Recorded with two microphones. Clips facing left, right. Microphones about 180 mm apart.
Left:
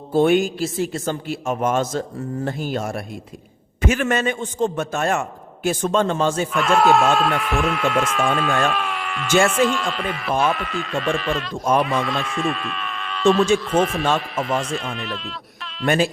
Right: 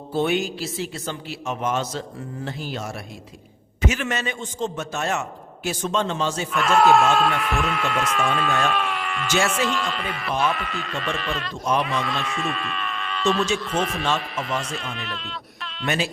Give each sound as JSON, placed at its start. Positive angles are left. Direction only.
{"t": 0.1, "sound": "a man's voice", "side_deg": 50}
{"t": 6.5, "sound": "speech", "side_deg": 0}